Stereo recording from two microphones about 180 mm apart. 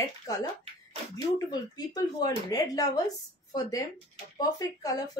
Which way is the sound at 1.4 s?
20° left (ahead or behind).